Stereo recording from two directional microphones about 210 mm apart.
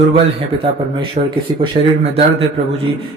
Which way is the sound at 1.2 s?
35° right (ahead or behind).